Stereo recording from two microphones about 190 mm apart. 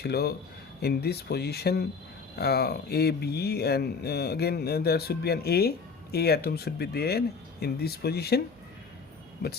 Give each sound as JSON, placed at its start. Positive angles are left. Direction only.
{"t": 0.0, "sound": "speech", "side_deg": 55}